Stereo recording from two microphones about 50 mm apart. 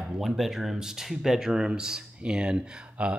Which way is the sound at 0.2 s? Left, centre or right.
Centre.